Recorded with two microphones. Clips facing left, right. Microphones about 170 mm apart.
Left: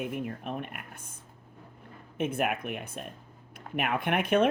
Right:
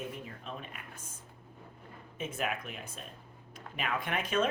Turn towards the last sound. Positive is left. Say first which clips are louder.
# left 6 dB
turn(degrees=60)  # may be behind; listen again after turning